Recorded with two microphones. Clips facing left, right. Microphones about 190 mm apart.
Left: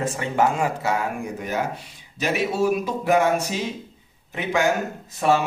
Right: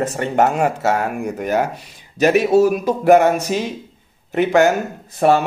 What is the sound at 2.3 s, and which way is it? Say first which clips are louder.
Speech: right 8 dB; 45° right (ahead or behind).